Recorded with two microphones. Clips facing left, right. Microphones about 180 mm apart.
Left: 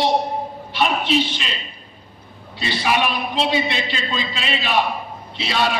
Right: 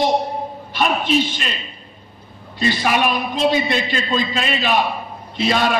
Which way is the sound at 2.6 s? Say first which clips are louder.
Right 3 dB; 45° right (ahead or behind).